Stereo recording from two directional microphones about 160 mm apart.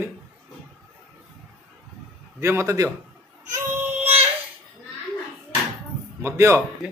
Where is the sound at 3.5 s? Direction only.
15° right (ahead or behind).